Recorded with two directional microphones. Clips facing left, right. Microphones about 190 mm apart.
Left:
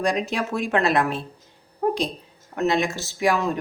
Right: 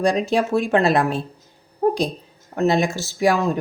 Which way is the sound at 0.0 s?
30° right (ahead or behind).